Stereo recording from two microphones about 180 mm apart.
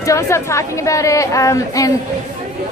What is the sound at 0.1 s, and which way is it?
A woman's voice, 15° left (ahead or behind).